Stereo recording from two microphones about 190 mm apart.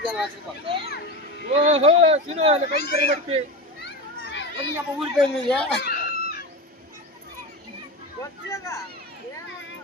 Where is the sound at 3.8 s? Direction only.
65° left (ahead or behind).